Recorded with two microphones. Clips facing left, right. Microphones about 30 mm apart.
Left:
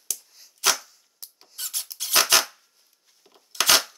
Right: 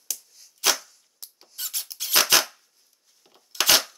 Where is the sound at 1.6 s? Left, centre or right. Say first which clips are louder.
Even; centre.